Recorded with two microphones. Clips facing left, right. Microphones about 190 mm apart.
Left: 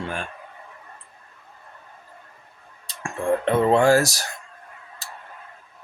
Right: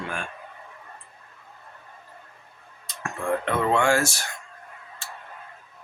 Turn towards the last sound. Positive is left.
turn(degrees=40)  # may be behind; listen again after turning